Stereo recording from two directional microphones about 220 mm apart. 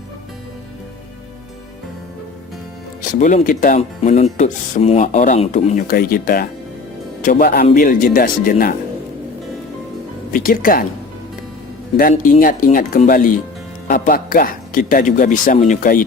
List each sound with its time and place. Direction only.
3.1 s speech: 35° left (ahead or behind)
5.9 s speech: 40° left (ahead or behind)
10.3 s speech: 40° left (ahead or behind)
11.9 s speech: 40° left (ahead or behind)